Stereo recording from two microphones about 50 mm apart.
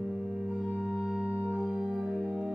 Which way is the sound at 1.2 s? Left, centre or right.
Right.